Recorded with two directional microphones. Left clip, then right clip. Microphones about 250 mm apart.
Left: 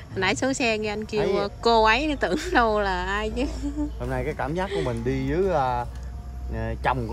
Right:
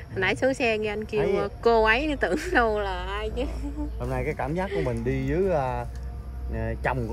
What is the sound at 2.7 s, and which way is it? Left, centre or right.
Speech, left.